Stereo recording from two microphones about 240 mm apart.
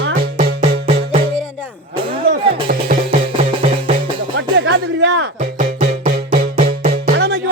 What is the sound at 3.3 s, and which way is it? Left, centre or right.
Music, right.